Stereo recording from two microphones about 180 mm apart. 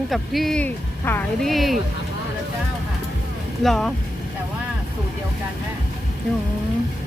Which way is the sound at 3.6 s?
Centre (ahead or behind).